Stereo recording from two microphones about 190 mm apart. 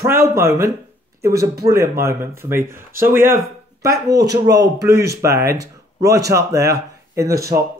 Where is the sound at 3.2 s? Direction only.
45° right (ahead or behind).